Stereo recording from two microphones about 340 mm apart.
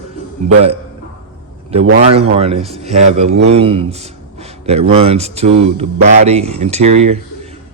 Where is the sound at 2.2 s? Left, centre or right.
Centre.